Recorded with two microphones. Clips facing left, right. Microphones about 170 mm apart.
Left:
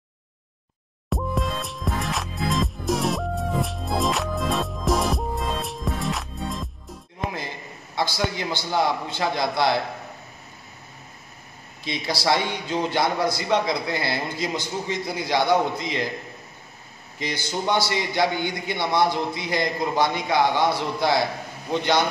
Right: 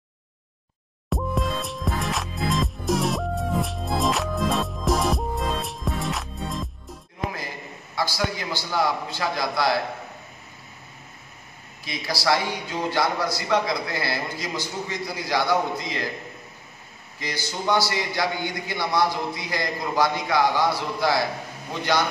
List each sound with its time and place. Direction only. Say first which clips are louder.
1.1 s music: even; centre (ahead or behind)
7.3 s a man's voice: left 1 dB; 25° left (ahead or behind)
11.8 s a man's voice: left 1 dB; 25° left (ahead or behind)
17.2 s a man's voice: left 3 dB; 20° left (ahead or behind)